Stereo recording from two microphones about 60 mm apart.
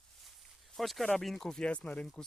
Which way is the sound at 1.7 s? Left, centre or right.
Left.